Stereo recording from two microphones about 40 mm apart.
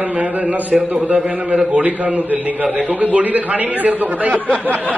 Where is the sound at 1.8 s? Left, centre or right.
Right.